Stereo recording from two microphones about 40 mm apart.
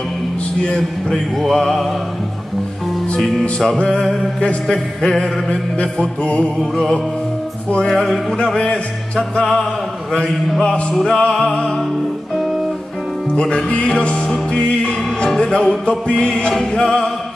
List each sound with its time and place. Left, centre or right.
1.1 s music: centre
3.2 s music: centre
6.2 s music: left
7.8 s music: centre
8.5 s music: left
9.4 s music: centre
10.9 s music: centre
13.3 s music: left